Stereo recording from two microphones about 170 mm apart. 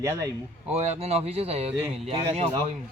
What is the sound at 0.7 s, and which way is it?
Speech, 40° right (ahead or behind).